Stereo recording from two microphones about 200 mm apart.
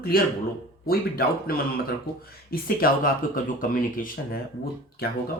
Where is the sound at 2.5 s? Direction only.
45° left (ahead or behind).